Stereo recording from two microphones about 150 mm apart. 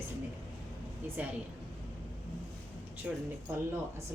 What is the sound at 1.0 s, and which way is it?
Speech, 10° right (ahead or behind).